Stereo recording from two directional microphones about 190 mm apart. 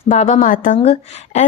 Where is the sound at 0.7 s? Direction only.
30° left (ahead or behind).